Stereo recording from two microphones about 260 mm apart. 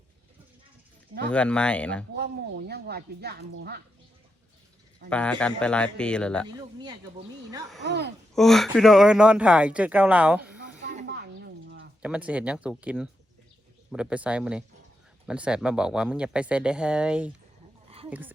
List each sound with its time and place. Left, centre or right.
1.3 s speech: centre
2.1 s speech: right
5.0 s speech: centre
7.9 s speech: right
8.4 s speech: centre
11.0 s a sound: right
12.0 s speech: centre